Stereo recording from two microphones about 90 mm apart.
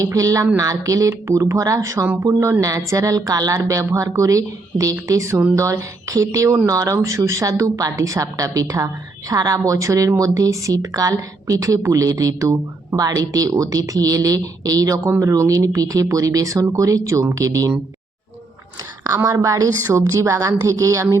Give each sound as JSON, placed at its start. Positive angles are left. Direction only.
{"t": 0.0, "sound": "a woman's voice", "side_deg": -40}
{"t": 19.0, "sound": "a woman's voice", "side_deg": -40}